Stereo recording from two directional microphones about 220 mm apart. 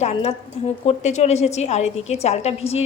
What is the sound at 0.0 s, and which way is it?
Speech, 30° left (ahead or behind).